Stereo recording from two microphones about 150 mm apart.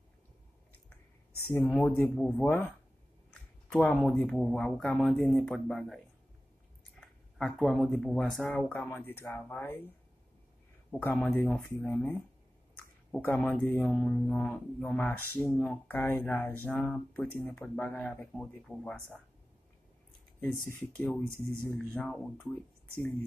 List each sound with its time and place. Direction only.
1.5 s speech: 15° left (ahead or behind)
2.4 s speech: 15° left (ahead or behind)
3.6 s speech: 5° left (ahead or behind)
7.3 s speech: centre (ahead or behind)
10.9 s speech: 10° left (ahead or behind)
20.6 s speech: 10° left (ahead or behind)